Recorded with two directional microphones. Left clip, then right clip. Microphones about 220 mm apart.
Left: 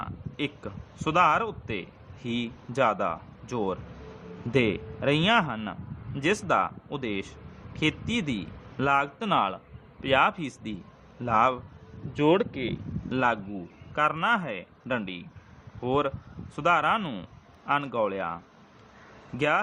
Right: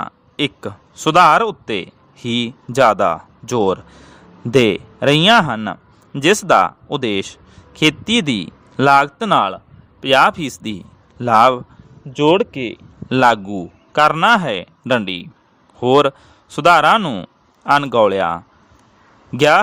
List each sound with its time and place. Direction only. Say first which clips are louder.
0.0 s a man's voice: right 12 dB; 40° right (ahead or behind)